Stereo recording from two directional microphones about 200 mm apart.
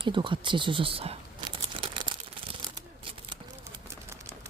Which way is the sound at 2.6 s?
25° right (ahead or behind).